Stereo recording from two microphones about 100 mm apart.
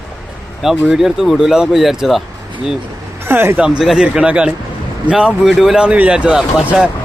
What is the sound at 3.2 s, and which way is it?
Speech, 25° right (ahead or behind).